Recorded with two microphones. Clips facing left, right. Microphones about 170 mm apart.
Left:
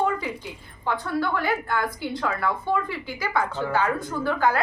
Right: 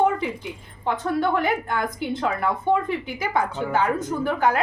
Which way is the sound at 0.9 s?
20° right (ahead or behind).